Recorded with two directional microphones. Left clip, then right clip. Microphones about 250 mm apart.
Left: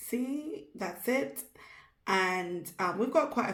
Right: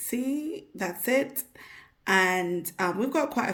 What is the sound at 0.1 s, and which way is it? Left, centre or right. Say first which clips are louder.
A woman's voice: right 4 dB; right.